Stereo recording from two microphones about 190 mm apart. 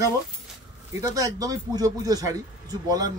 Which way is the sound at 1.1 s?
20° right (ahead or behind).